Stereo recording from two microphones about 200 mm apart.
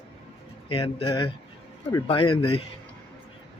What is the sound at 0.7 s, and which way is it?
A man's voice, 25° left (ahead or behind).